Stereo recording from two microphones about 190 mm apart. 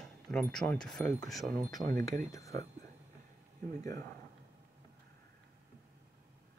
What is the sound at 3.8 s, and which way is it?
Speech, 20° left (ahead or behind).